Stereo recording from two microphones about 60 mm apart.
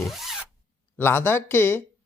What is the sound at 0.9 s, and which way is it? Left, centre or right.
Speech, left.